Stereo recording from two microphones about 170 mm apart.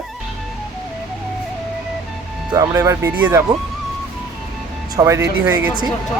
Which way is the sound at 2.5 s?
20° right (ahead or behind).